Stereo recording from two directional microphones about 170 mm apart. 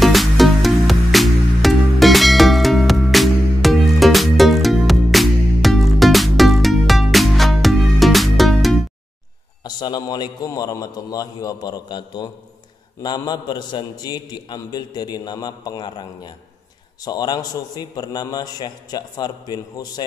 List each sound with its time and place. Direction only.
0.0 s music: centre (ahead or behind)
9.6 s a man's voice: 25° left (ahead or behind)